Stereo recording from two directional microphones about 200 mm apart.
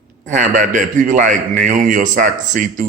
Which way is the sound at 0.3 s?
40° right (ahead or behind).